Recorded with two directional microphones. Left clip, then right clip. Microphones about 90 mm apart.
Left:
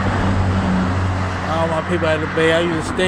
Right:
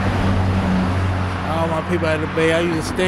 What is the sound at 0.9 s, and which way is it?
Vehicle, 40° left (ahead or behind).